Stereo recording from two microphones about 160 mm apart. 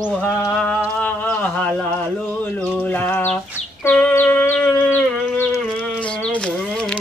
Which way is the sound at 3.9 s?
10° left (ahead or behind).